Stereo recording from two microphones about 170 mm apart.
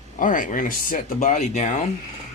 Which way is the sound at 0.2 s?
50° left (ahead or behind).